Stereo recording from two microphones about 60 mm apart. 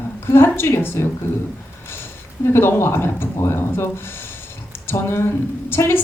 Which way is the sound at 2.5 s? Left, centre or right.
Left.